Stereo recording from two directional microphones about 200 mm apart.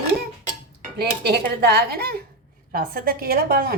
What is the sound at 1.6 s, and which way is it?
A woman's voice, 55° right (ahead or behind).